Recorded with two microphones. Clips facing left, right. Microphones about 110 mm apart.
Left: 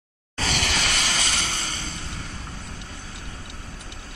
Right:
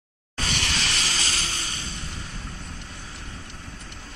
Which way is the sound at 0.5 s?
90° left.